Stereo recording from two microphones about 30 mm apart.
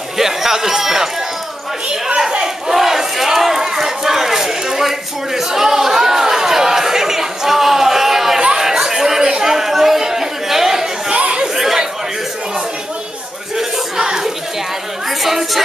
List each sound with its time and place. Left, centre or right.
0.2 s a man's voice: centre
2.4 s battle cry: centre
3.3 s a sound: centre
8.5 s chatter: centre
11.1 s chatter: right
11.4 s chatter: centre
13.9 s chatter: right
15.2 s a sound: centre